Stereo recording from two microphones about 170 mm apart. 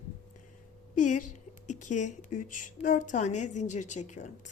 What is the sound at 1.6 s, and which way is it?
Speech, 45° left (ahead or behind).